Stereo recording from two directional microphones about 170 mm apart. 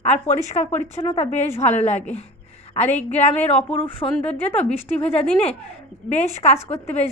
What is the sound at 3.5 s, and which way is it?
Speech, 35° left (ahead or behind).